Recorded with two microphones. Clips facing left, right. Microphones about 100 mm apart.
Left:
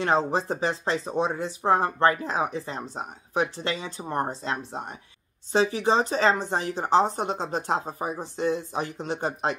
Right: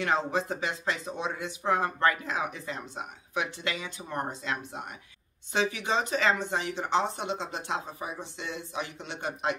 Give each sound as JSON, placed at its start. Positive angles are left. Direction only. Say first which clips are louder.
{"t": 0.0, "sound": "speech", "louder": "left 4 dB", "side_deg": 35}